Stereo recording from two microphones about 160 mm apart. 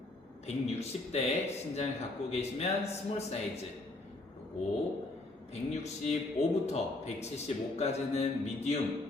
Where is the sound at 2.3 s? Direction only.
40° left (ahead or behind).